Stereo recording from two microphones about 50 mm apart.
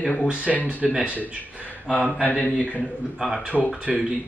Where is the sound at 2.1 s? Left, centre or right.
Left.